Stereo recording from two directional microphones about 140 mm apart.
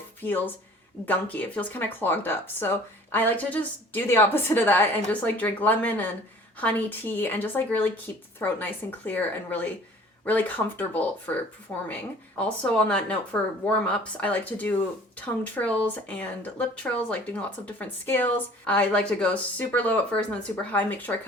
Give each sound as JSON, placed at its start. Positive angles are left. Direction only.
{"t": 0.2, "sound": "speech", "side_deg": 15}